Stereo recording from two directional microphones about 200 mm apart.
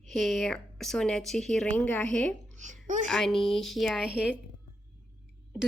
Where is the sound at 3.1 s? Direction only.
Centre (ahead or behind).